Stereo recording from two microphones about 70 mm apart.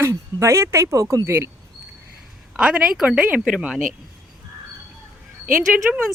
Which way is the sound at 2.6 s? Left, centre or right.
Centre.